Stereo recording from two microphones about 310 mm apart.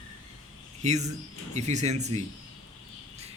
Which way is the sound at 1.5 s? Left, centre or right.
Right.